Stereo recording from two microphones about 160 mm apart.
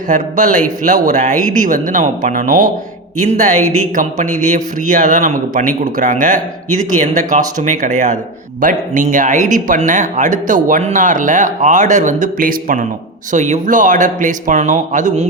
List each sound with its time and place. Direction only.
0.1 s speech: 55° right (ahead or behind)